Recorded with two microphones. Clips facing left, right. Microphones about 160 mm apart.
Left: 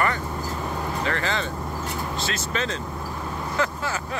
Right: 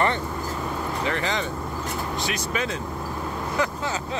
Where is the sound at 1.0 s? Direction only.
15° right (ahead or behind).